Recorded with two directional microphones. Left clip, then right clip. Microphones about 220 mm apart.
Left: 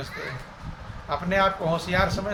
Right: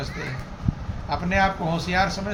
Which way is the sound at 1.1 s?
20° left (ahead or behind).